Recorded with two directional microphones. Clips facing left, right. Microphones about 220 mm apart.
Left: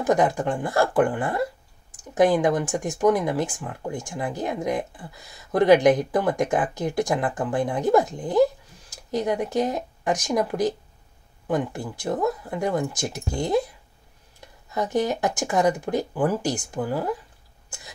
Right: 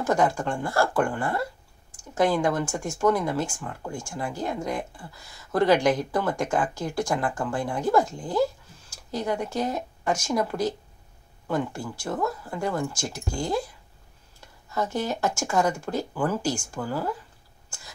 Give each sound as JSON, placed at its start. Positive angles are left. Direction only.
{"t": 0.0, "sound": "speech", "side_deg": 20}